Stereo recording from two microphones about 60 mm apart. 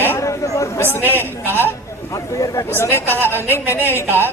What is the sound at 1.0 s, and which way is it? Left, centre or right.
Speech, right.